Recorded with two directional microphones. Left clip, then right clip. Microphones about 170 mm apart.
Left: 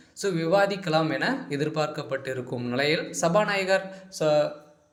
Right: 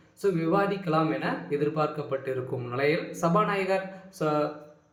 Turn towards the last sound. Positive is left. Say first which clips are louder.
# left 5 dB
turn(degrees=30)  # may be behind; listen again after turning